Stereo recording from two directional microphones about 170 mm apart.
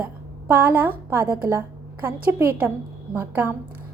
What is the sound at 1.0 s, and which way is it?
A woman's voice, 15° right (ahead or behind).